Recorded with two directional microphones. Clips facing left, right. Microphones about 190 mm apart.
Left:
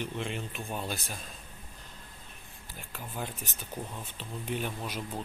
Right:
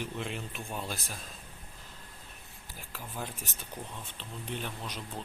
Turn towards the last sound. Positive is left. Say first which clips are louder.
# left 4 dB
turn(degrees=10)  # may be behind; listen again after turning